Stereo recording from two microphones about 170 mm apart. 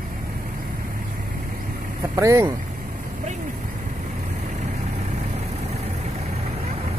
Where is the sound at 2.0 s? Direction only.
20° right (ahead or behind).